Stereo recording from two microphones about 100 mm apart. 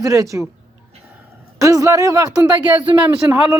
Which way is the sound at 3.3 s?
20° right (ahead or behind).